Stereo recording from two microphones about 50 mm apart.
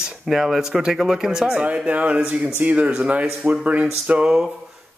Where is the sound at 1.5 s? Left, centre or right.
Right.